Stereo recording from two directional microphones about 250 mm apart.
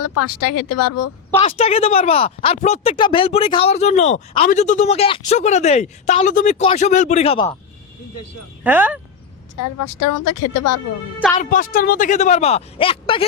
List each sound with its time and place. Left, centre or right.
0.0 s speech: left
1.4 s speech: left
8.6 s speech: centre
9.6 s speech: left
11.4 s speech: left